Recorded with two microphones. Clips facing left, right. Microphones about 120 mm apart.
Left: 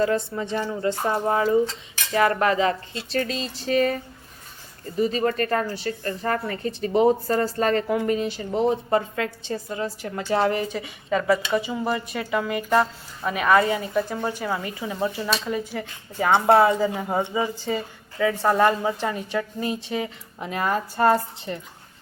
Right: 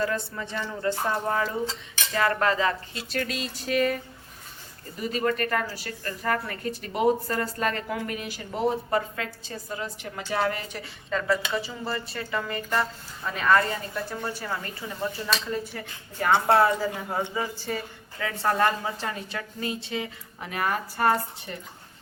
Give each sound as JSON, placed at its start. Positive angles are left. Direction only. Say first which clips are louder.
{"t": 1.0, "sound": "a woman's voice", "louder": "left 7 dB", "side_deg": 25}
{"t": 2.9, "sound": "a woman's voice", "louder": "left 4 dB", "side_deg": 30}
{"t": 4.9, "sound": "a woman's voice", "louder": "left 4 dB", "side_deg": 35}